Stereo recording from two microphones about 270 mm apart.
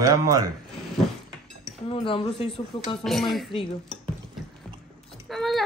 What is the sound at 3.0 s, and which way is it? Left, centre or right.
Speech, centre.